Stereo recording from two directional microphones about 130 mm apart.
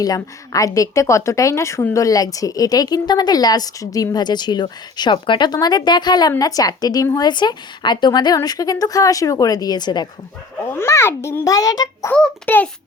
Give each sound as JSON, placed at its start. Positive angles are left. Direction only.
{"t": 0.0, "sound": "a woman's voice", "side_deg": 25}
{"t": 10.6, "sound": "speech", "side_deg": 20}
{"t": 12.1, "sound": "a child's voice", "side_deg": 10}